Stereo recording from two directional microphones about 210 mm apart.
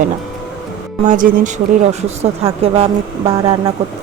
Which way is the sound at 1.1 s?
35° right (ahead or behind).